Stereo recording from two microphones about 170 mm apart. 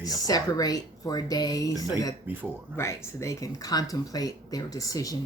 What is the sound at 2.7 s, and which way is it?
Speech, 15° left (ahead or behind).